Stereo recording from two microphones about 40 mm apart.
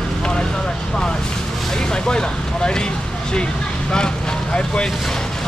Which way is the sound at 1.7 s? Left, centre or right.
Centre.